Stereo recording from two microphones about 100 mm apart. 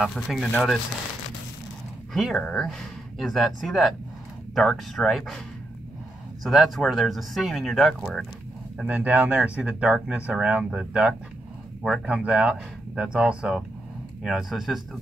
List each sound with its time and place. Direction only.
0.0 s speech: centre (ahead or behind)
2.1 s speech: centre (ahead or behind)
6.4 s speech: centre (ahead or behind)
8.8 s speech: 15° right (ahead or behind)